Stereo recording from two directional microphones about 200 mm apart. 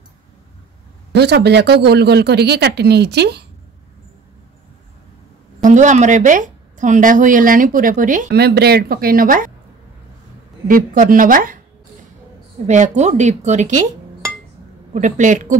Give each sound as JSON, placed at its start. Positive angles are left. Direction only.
{"t": 1.1, "sound": "speech", "side_deg": -55}
{"t": 5.6, "sound": "a woman's voice", "side_deg": -40}
{"t": 10.7, "sound": "a woman's voice", "side_deg": -45}
{"t": 12.6, "sound": "a woman's voice", "side_deg": -35}
{"t": 15.0, "sound": "a woman's voice", "side_deg": -35}